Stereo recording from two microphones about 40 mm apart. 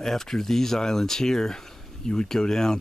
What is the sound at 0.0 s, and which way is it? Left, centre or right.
Speech, centre.